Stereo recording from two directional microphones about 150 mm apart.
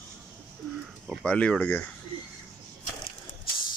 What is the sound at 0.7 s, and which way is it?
Bird, 5° right (ahead or behind).